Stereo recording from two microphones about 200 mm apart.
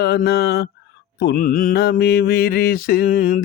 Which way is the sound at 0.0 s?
55° left (ahead or behind).